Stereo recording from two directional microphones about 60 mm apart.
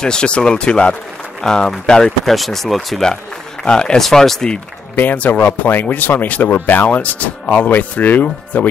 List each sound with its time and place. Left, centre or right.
0.0 s speech: centre
3.6 s speech: centre
4.9 s speech: left